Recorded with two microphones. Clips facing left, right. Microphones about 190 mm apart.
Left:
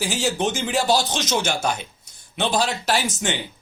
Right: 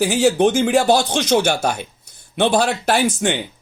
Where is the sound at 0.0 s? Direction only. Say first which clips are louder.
Right 8 dB; 55° right (ahead or behind).